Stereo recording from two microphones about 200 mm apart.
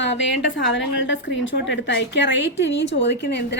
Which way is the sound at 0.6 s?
65° left (ahead or behind).